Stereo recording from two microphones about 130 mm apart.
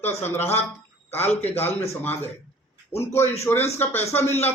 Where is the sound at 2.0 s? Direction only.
15° left (ahead or behind).